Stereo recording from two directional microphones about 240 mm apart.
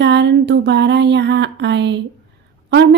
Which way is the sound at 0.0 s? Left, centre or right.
Right.